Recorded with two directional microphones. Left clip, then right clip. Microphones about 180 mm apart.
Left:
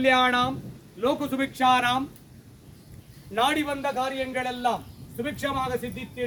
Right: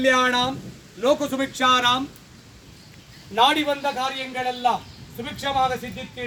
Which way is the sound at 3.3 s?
Centre (ahead or behind).